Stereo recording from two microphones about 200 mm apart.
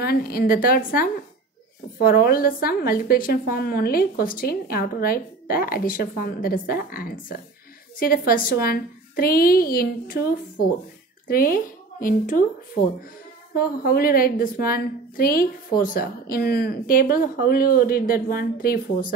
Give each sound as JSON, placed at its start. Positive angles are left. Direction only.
{"t": 0.0, "sound": "a woman's voice", "side_deg": 50}
{"t": 2.0, "sound": "a woman's voice", "side_deg": 45}
{"t": 13.6, "sound": "a woman's voice", "side_deg": 50}